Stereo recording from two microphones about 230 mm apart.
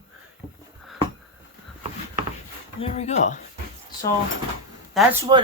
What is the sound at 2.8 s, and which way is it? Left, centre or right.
Speech, left.